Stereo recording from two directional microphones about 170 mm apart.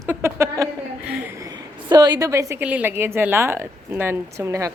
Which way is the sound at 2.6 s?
10° right (ahead or behind).